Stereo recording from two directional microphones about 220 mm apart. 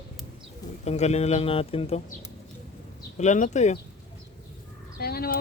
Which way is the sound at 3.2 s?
35° left (ahead or behind).